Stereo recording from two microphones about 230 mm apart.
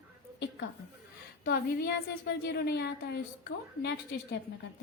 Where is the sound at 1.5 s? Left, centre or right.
Left.